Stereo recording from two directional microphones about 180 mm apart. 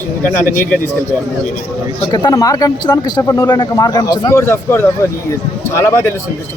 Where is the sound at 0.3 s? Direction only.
50° left (ahead or behind).